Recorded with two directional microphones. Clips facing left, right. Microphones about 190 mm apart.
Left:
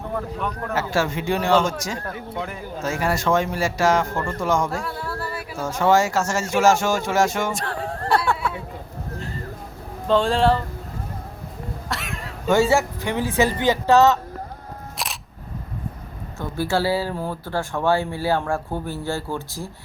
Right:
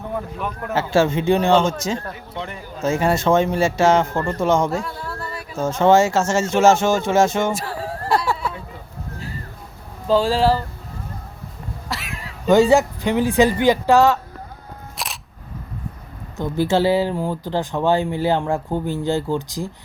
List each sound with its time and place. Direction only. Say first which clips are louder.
0.1 s speech: even; 5° right (ahead or behind)
0.7 s a man's voice: right 6 dB; 25° right (ahead or behind)
2.0 s speech: left 1 dB; 5° left (ahead or behind)
2.8 s a man's voice: right 5 dB; 25° right (ahead or behind)
4.8 s a sound: even; 5° left (ahead or behind)
5.5 s a man's voice: right 4 dB; 25° right (ahead or behind)
7.5 s a sound: right 1 dB; 5° right (ahead or behind)
10.1 s speech: right 1 dB; 5° right (ahead or behind)
11.9 s a sound: right 1 dB; centre (ahead or behind)
12.5 s speech: right 4 dB; 15° right (ahead or behind)
14.9 s single-lens reflex camera: right 1 dB; centre (ahead or behind)
16.4 s speech: right 5 dB; 20° right (ahead or behind)